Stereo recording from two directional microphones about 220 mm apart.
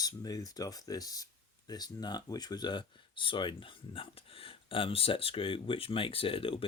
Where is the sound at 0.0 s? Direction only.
15° left (ahead or behind).